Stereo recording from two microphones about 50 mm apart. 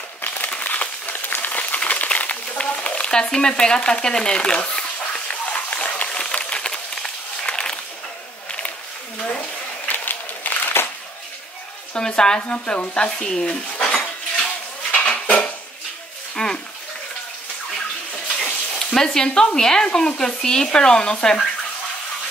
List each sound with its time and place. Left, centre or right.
0.2 s crumpling: left
0.5 s a sound: left
9.8 s a sound: left
11.9 s speech: centre
12.4 s speech: left
13.5 s dishes: left
14.9 s dishes: left
16.4 s bathtub: centre
18.9 s speech: centre